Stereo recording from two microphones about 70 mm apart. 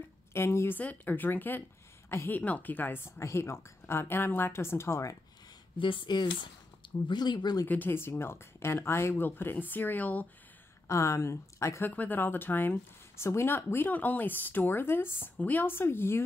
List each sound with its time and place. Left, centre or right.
0.3 s speech: left
0.7 s a woman's voice: left
2.4 s speech: left
3.2 s speech: left
6.1 s speech: left
7.6 s speech: left
10.9 s speech: left
11.8 s speech: left
13.8 s speech: left